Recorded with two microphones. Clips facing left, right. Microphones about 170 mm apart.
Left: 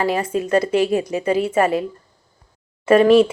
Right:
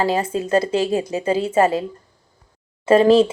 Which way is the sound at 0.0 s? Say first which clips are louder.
Even; 25° right (ahead or behind).